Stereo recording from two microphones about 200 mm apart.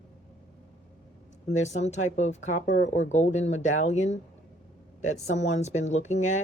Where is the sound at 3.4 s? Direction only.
75° left (ahead or behind).